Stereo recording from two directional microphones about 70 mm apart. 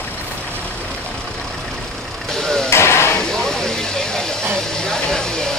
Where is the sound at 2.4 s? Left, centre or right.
Centre.